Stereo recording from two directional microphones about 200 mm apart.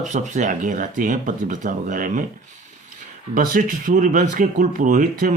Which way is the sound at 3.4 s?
45° right (ahead or behind).